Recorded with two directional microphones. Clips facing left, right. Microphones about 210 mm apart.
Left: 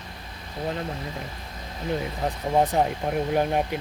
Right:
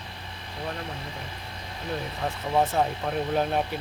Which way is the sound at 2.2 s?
20° left (ahead or behind).